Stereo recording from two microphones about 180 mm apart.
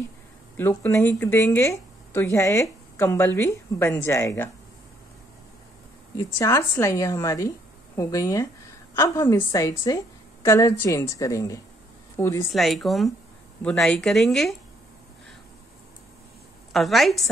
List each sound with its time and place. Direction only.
0.6 s speech: 15° left (ahead or behind)
6.1 s a woman's voice: 15° left (ahead or behind)
12.5 s a woman's voice: centre (ahead or behind)
16.7 s a woman's voice: centre (ahead or behind)